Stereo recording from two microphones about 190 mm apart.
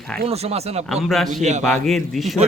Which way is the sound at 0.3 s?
35° right (ahead or behind).